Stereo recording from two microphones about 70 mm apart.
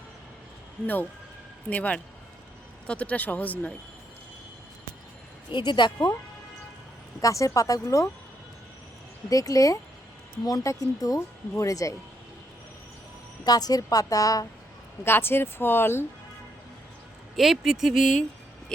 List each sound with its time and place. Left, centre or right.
1.7 s speech: centre
5.5 s speech: left
7.2 s speech: left
9.3 s speech: left
13.4 s speech: left
15.0 s speech: left
17.3 s speech: centre